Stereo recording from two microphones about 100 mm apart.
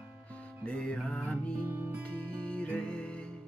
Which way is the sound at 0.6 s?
10° left (ahead or behind).